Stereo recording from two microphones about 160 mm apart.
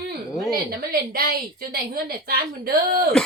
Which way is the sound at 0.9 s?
70° right (ahead or behind).